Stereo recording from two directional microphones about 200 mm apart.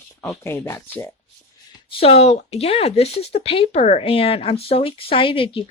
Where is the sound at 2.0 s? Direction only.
30° left (ahead or behind).